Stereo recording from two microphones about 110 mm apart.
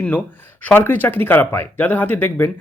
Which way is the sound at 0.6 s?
15° left (ahead or behind).